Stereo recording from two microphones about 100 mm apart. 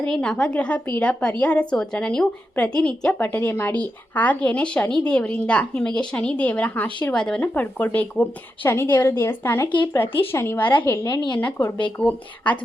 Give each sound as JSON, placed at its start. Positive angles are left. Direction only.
{"t": 0.0, "sound": "a woman's voice", "side_deg": 10}
{"t": 11.3, "sound": "a woman's voice", "side_deg": 15}